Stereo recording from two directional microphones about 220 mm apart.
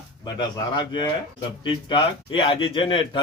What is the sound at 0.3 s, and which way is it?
Speech, 20° left (ahead or behind).